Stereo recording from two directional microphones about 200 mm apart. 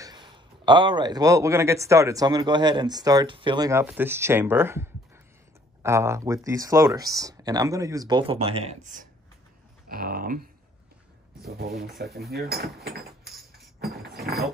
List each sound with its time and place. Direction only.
0.0 s speech: 20° right (ahead or behind)
9.8 s speech: 45° right (ahead or behind)
11.4 s speech: 50° right (ahead or behind)